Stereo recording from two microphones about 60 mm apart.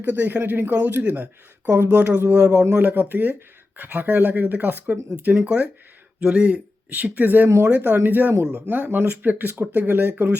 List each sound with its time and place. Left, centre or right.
0.0 s speech: right
2.3 s speech: centre
2.7 s speech: right